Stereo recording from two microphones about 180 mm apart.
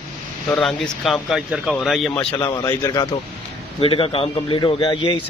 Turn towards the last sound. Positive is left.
turn(degrees=25)  # may be behind; listen again after turning